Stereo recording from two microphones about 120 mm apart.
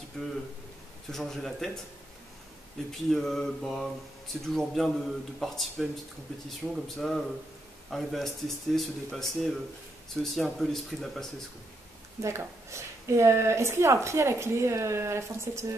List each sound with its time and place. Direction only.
0.2 s speech: 5° left (ahead or behind)
2.9 s speech: centre (ahead or behind)
12.2 s a woman's voice: 25° right (ahead or behind)